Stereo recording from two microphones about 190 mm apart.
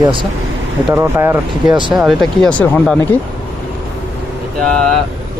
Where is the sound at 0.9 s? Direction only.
15° right (ahead or behind).